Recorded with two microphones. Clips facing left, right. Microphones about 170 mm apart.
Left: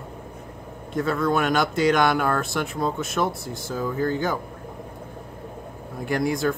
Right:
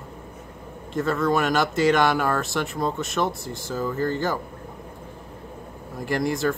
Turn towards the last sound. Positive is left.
turn(degrees=0)  # may be behind; listen again after turning